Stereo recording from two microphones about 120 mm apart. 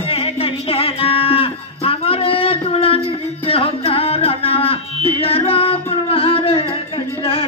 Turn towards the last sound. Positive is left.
turn(degrees=50)  # may be behind; listen again after turning